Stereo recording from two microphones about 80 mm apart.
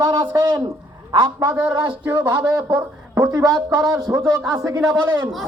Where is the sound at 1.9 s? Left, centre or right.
Right.